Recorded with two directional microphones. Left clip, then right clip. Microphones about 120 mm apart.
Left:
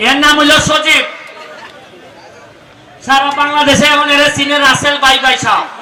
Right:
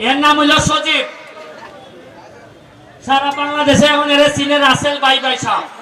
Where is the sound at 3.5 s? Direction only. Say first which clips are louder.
Even; 30° left (ahead or behind).